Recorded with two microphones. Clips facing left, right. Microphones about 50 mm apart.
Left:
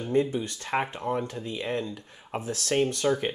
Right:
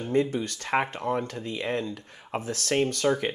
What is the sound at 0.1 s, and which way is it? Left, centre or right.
Speech, right.